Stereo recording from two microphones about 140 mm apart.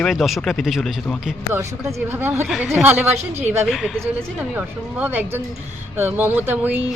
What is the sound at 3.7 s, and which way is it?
A woman's voice, centre (ahead or behind).